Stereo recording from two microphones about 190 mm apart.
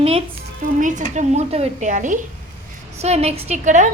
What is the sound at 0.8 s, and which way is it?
A woman's voice, 40° right (ahead or behind).